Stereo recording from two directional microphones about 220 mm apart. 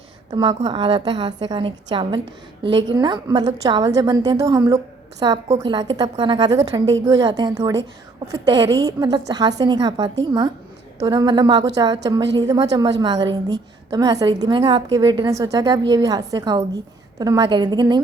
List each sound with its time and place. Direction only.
0.3 s a woman's voice: 20° right (ahead or behind)